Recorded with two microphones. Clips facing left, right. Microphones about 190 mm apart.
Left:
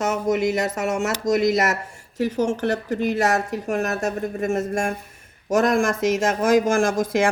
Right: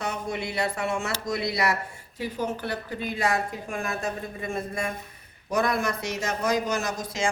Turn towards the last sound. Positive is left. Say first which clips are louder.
# left 9 dB
turn(degrees=55)  # may be behind; listen again after turning